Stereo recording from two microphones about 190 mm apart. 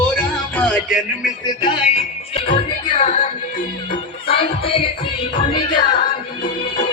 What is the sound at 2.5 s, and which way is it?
Music, 30° left (ahead or behind).